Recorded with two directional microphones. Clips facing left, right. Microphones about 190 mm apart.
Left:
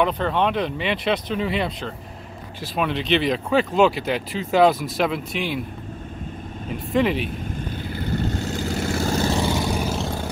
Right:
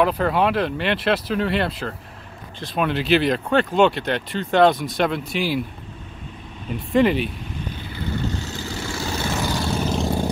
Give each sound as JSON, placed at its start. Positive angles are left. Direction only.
{"t": 0.0, "sound": "speech", "side_deg": -5}
{"t": 6.7, "sound": "speech", "side_deg": 0}
{"t": 7.9, "sound": "vehicle", "side_deg": 45}
{"t": 9.4, "sound": "vehicle", "side_deg": 20}